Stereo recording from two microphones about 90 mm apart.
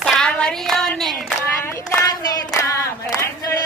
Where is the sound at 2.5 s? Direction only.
35° left (ahead or behind).